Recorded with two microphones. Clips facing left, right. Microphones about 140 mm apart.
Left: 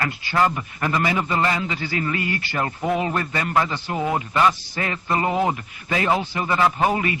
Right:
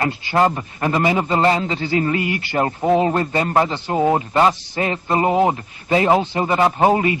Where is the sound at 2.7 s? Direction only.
30° right (ahead or behind).